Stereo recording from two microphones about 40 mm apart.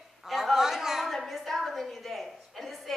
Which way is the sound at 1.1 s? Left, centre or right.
Centre.